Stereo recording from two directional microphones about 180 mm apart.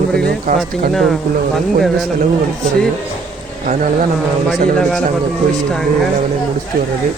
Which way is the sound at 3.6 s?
45° right (ahead or behind).